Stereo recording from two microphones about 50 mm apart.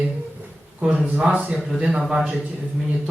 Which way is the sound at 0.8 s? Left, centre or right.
Centre.